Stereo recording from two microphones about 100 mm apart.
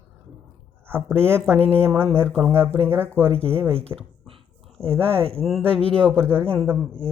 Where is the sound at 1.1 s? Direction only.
25° right (ahead or behind).